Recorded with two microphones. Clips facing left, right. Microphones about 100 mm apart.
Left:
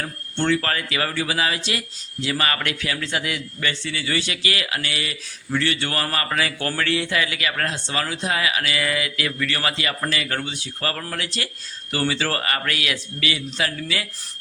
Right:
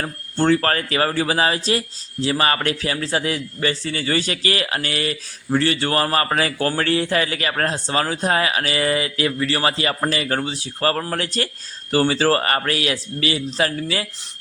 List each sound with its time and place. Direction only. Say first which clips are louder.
0.0 s a man's voice: right 4 dB; 40° right (ahead or behind)